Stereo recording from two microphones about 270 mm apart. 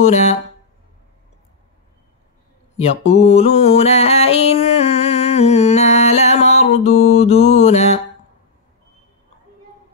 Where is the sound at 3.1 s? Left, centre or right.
Left.